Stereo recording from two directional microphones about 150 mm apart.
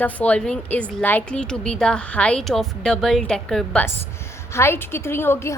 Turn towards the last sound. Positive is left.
turn(degrees=15)  # may be behind; listen again after turning